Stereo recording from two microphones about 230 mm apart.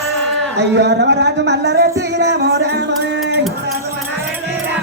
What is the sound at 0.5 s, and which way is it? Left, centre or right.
Music, right.